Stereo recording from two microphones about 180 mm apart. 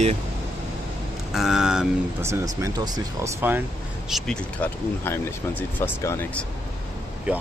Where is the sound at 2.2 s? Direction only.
15° right (ahead or behind).